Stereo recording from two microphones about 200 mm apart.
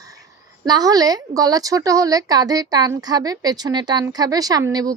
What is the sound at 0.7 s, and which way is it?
A woman's voice, 20° right (ahead or behind).